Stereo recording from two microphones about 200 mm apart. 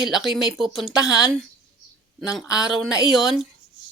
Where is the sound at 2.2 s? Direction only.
Centre (ahead or behind).